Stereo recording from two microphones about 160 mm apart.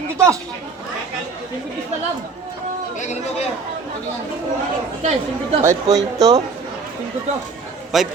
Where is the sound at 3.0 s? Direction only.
45° left (ahead or behind).